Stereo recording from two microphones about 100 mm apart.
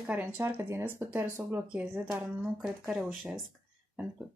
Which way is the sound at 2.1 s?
25° right (ahead or behind).